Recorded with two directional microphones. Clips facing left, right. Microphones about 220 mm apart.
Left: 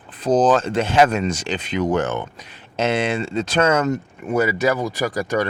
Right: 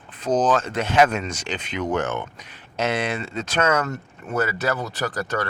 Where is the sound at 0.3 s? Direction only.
30° left (ahead or behind).